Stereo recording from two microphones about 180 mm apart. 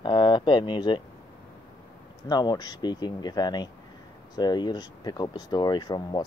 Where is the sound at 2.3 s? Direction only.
25° left (ahead or behind).